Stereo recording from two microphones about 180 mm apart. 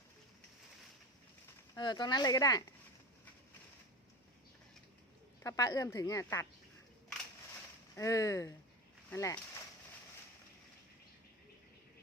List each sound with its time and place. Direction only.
1.7 s speech: 25° left (ahead or behind)
5.4 s a woman's voice: 20° left (ahead or behind)
7.9 s a woman's voice: 20° left (ahead or behind)